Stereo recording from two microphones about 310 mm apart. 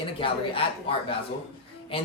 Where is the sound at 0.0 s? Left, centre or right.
Centre.